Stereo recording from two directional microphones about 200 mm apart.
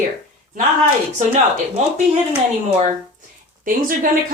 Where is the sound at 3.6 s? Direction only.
45° right (ahead or behind).